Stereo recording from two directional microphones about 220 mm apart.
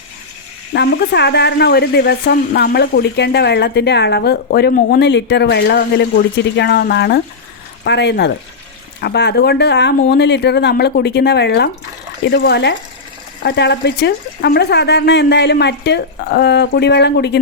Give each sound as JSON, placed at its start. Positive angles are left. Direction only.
{"t": 0.7, "sound": "speech", "side_deg": 50}